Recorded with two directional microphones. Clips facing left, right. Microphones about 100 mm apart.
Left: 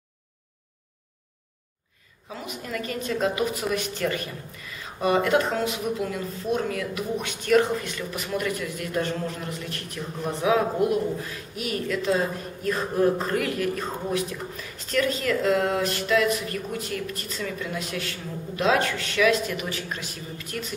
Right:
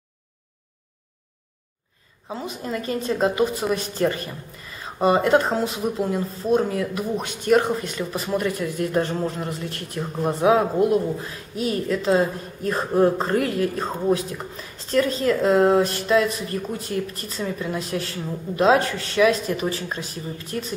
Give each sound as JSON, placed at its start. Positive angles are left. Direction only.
{"t": 2.2, "sound": "a woman's voice", "side_deg": -30}